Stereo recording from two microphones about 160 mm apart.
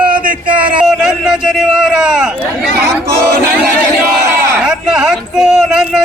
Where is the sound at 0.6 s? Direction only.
5° right (ahead or behind).